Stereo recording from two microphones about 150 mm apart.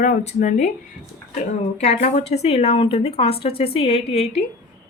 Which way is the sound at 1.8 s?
45° left (ahead or behind).